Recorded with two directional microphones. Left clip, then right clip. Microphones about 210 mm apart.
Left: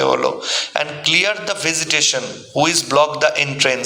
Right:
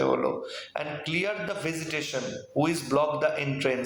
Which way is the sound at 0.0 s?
50° left (ahead or behind).